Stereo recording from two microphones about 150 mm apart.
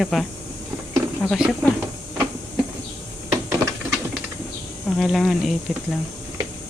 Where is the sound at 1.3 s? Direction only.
5° right (ahead or behind).